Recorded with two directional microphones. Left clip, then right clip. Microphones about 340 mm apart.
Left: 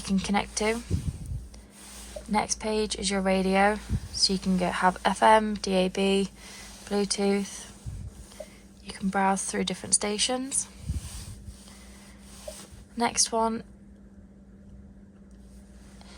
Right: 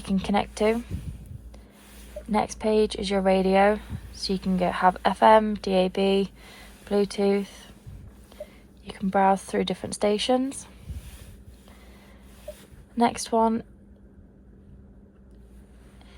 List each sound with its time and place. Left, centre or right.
0.0 s a woman's voice: centre
2.3 s a woman's voice: centre
8.9 s a woman's voice: centre
13.0 s a woman's voice: centre